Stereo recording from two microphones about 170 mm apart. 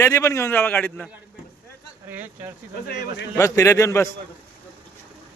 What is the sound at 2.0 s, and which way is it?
Speech, 10° right (ahead or behind).